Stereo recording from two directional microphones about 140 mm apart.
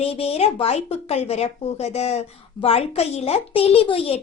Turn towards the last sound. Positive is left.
turn(degrees=45)  # may be behind; listen again after turning